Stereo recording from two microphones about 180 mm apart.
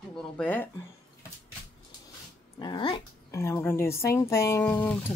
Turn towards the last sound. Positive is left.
turn(degrees=10)  # may be behind; listen again after turning